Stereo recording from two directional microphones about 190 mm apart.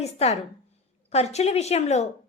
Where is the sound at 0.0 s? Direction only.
35° left (ahead or behind).